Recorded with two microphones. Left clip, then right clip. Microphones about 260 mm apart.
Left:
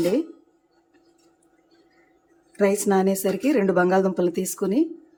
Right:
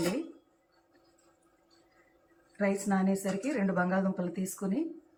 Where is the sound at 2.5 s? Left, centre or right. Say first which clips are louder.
Left 11 dB; left.